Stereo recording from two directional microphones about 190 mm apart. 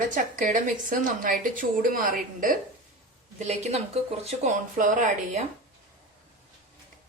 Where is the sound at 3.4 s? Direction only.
35° right (ahead or behind).